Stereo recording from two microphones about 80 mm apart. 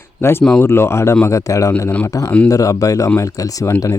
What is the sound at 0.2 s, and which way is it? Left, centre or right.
Speech, left.